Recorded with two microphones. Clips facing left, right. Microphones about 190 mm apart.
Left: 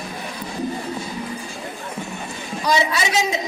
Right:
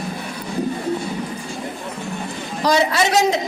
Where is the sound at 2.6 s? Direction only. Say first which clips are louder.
Right 4 dB; 65° right (ahead or behind).